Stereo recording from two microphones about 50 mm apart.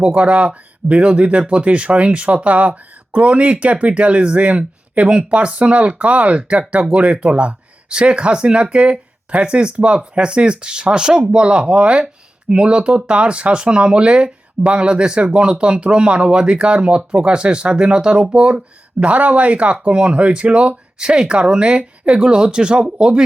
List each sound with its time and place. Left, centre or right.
0.0 s speech: right